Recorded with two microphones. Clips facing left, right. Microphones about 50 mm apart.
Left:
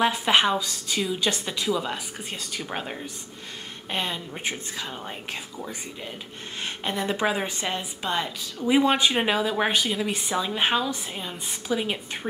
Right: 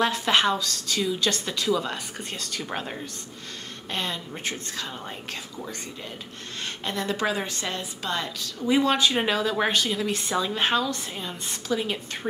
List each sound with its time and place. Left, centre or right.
0.0 s a woman's voice: centre